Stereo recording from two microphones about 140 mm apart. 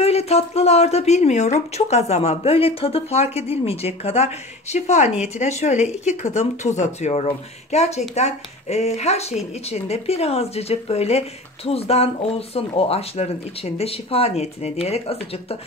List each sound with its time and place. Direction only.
0.0 s speech: 50° left (ahead or behind)